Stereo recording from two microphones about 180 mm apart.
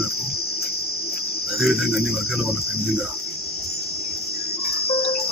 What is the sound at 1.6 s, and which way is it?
Cricket, centre (ahead or behind).